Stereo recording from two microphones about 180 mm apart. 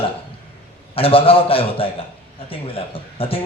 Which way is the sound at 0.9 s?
30° left (ahead or behind).